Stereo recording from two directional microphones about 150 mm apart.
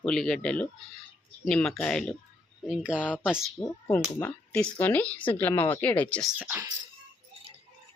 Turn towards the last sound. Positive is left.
turn(degrees=-10)  # may be behind; listen again after turning